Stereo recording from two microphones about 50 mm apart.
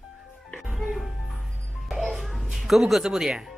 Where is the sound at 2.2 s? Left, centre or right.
Centre.